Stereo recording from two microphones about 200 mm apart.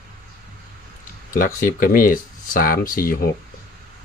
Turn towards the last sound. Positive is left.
turn(degrees=45)  # may be behind; listen again after turning